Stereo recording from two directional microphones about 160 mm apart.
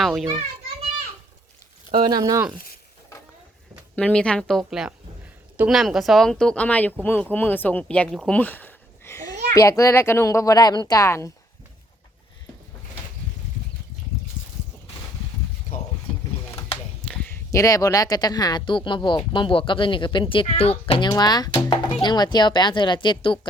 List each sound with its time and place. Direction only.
0.0 s speech: centre (ahead or behind)
2.0 s speech: 25° right (ahead or behind)
3.9 s speech: 5° left (ahead or behind)
17.3 s speech: 20° left (ahead or behind); by 21.1 s 35° left (ahead or behind)
21.1 s speech: 25° left (ahead or behind)